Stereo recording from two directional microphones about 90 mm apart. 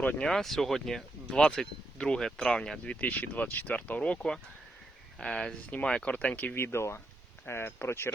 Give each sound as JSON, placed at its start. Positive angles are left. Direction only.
{"t": 0.0, "sound": "speech", "side_deg": 15}
{"t": 0.3, "sound": "speech", "side_deg": 5}